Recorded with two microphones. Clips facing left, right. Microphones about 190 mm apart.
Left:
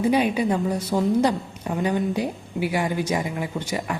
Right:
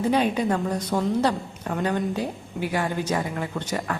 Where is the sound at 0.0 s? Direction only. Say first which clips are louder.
Left 2 dB; 10° left (ahead or behind).